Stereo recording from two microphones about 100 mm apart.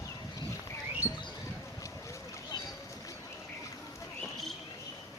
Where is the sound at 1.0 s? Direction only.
30° left (ahead or behind).